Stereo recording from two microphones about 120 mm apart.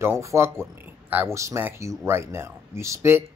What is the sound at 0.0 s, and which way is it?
Speech, 20° right (ahead or behind).